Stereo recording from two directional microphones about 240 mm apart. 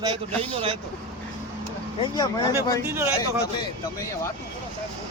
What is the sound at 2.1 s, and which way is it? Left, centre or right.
Speech, centre.